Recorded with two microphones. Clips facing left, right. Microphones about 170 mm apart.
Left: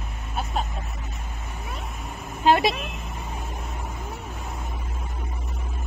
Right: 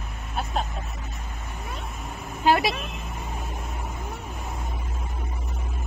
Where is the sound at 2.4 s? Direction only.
25° left (ahead or behind).